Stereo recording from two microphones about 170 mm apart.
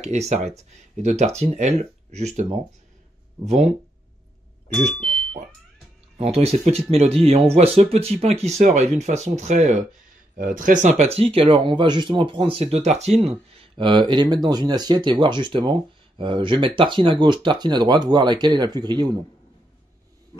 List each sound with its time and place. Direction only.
0.0 s speech: 40° right (ahead or behind)
3.4 s speech: 40° right (ahead or behind)
4.7 s speech: 5° left (ahead or behind)
6.3 s speech: 35° right (ahead or behind)